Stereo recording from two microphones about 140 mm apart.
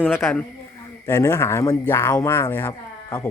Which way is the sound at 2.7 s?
25° left (ahead or behind).